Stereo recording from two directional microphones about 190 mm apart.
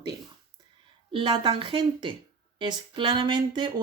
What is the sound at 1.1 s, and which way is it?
Speech, 25° right (ahead or behind).